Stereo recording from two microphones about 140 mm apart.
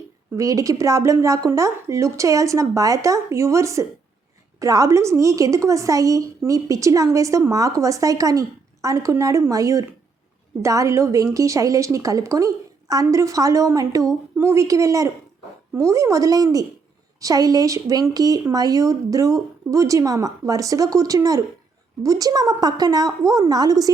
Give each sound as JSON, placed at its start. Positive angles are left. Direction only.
{"t": 0.3, "sound": "a woman's voice", "side_deg": -25}